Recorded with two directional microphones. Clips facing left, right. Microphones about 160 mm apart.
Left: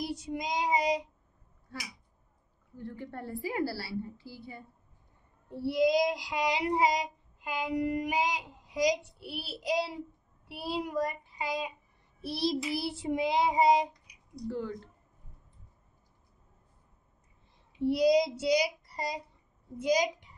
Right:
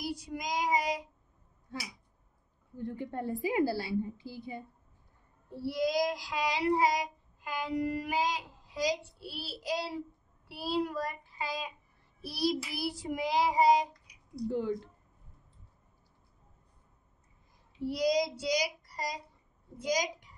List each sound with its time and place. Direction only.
0.0 s child singing: 25° left (ahead or behind)
2.8 s a woman's voice: 20° right (ahead or behind)
5.5 s child singing: 20° left (ahead or behind)
14.5 s a woman's voice: 15° right (ahead or behind)
17.8 s child singing: 25° left (ahead or behind)